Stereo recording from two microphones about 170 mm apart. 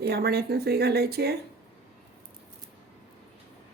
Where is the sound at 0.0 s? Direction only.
70° right (ahead or behind).